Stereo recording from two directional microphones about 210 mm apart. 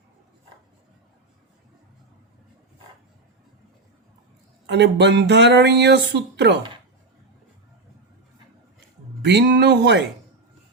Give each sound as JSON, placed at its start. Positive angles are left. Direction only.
{"t": 4.6, "sound": "speech", "side_deg": -55}
{"t": 9.2, "sound": "speech", "side_deg": -55}